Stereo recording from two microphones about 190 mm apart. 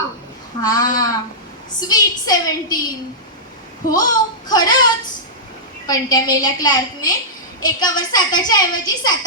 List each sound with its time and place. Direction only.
0.6 s a woman's voice: 20° left (ahead or behind)
3.8 s a woman's voice: 20° left (ahead or behind)